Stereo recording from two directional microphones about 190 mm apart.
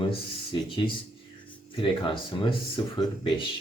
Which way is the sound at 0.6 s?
25° left (ahead or behind).